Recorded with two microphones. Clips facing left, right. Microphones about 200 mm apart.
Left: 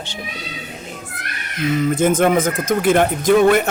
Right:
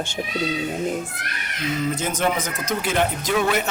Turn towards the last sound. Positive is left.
turn(degrees=50)  # may be behind; listen again after turning